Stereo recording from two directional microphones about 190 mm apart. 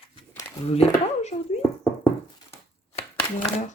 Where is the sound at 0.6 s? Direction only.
35° left (ahead or behind).